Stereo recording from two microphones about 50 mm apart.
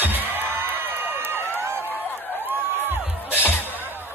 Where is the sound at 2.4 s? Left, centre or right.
Right.